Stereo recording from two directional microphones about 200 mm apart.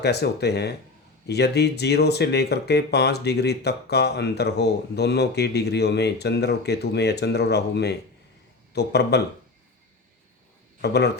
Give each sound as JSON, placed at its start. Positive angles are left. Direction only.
{"t": 0.0, "sound": "speech", "side_deg": 55}
{"t": 10.8, "sound": "a man's voice", "side_deg": 55}